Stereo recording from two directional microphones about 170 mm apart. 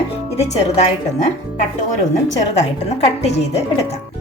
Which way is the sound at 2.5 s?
40° left (ahead or behind).